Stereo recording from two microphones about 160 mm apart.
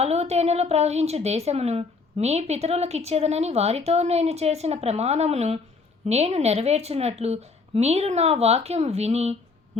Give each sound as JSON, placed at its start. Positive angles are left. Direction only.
{"t": 0.0, "sound": "a woman's voice", "side_deg": -40}